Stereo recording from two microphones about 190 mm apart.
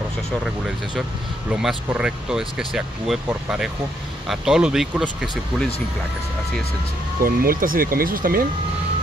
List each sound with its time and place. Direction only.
1.5 s speech: 5° right (ahead or behind)
7.2 s speech: 50° right (ahead or behind)